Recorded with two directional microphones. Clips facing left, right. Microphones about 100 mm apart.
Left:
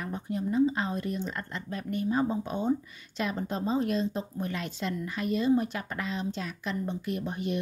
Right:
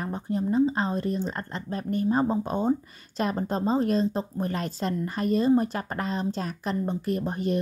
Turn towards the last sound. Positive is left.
turn(degrees=-40)  # may be behind; listen again after turning